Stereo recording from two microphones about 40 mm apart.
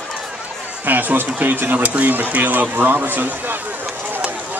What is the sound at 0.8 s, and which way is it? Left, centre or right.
Speech, right.